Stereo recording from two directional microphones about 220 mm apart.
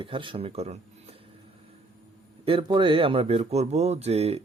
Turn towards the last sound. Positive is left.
turn(degrees=-30)  # may be behind; listen again after turning